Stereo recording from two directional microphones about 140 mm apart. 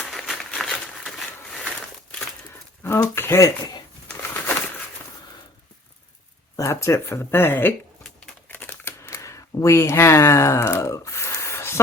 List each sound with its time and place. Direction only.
0.0 s crumpling: centre (ahead or behind)
2.8 s speech: 15° left (ahead or behind)
6.6 s speech: 20° left (ahead or behind)
8.4 s a sound: 15° left (ahead or behind)